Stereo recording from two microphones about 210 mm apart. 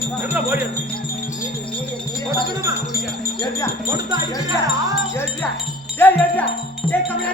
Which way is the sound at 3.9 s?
15° right (ahead or behind).